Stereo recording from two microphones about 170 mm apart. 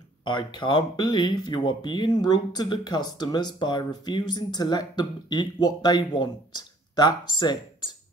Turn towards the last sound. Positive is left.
turn(degrees=25)  # may be behind; listen again after turning